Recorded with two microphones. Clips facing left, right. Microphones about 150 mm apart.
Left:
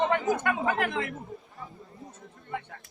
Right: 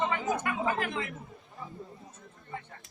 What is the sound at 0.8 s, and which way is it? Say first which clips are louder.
Speech: left 4 dB; 60° left (ahead or behind).